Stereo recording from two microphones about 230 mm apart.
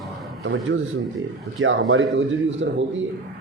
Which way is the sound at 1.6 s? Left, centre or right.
Right.